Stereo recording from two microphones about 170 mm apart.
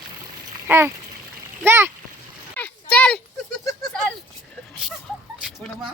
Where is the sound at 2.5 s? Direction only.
10° left (ahead or behind).